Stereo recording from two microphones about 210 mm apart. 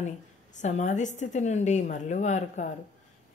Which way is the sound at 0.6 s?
35° left (ahead or behind).